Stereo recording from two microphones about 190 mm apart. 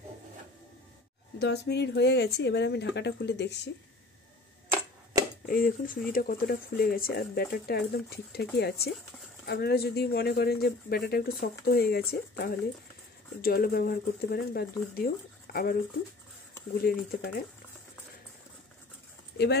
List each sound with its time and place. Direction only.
1.4 s speech: 60° left (ahead or behind)
5.5 s speech: 50° left (ahead or behind)
16.8 s speech: 50° left (ahead or behind)
19.3 s speech: 60° left (ahead or behind)